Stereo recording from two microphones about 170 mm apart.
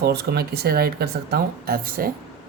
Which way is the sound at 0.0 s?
70° right (ahead or behind).